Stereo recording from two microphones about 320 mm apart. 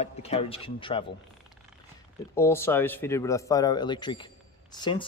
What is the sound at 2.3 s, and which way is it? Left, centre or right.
A man's voice, centre.